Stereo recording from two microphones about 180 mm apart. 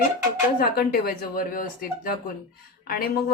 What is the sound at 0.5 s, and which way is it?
Speech, 55° left (ahead or behind).